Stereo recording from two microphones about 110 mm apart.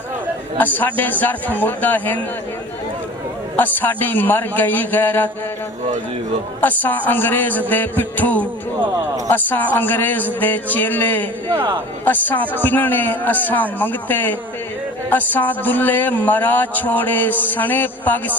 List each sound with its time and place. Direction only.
0.6 s speech: 15° left (ahead or behind)
3.5 s speech: 15° left (ahead or behind)
6.6 s speech: 15° left (ahead or behind)